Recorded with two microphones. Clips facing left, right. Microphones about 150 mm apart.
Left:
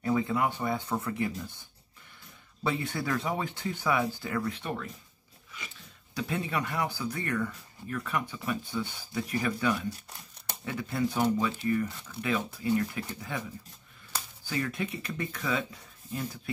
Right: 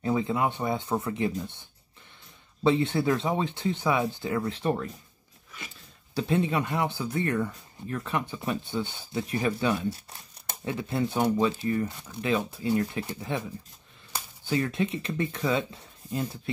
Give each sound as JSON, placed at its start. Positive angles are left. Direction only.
{"t": 0.0, "sound": "speech", "side_deg": -20}
{"t": 4.6, "sound": "speech", "side_deg": -35}
{"t": 6.1, "sound": "speech", "side_deg": -25}
{"t": 14.4, "sound": "speech", "side_deg": -25}